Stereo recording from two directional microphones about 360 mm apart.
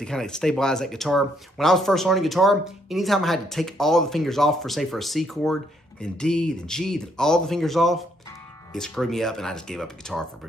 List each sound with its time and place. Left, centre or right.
0.0 s speech: centre